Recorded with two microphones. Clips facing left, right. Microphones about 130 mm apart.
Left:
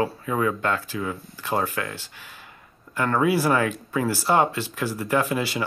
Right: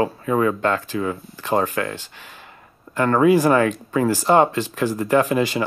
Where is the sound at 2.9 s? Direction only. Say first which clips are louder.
Right 6 dB; 45° right (ahead or behind).